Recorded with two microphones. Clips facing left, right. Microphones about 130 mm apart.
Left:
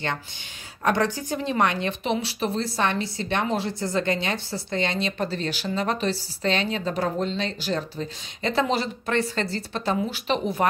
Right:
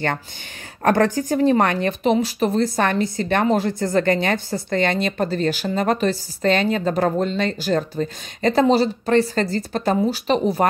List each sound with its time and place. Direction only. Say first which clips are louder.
0.8 s a woman's voice: right 6 dB; 45° right (ahead or behind)